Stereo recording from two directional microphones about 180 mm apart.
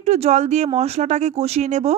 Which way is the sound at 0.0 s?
40° right (ahead or behind).